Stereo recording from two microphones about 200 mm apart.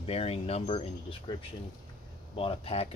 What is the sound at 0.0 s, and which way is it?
Speech, 30° left (ahead or behind).